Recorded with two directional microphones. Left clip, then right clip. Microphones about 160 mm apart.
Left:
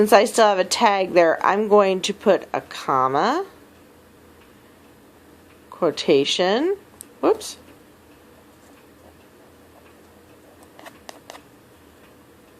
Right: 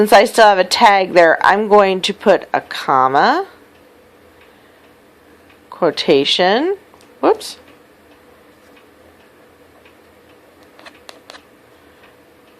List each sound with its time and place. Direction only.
0.0 s a woman's voice: 25° right (ahead or behind)
5.8 s a woman's voice: 20° right (ahead or behind)